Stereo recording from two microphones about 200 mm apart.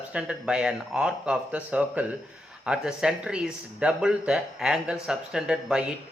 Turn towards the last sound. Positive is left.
turn(degrees=-5)  # may be behind; listen again after turning